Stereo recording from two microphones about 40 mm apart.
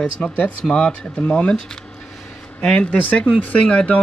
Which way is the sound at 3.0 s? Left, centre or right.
Left.